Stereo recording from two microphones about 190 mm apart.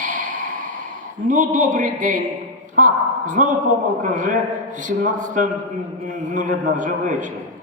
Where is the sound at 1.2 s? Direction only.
45° right (ahead or behind).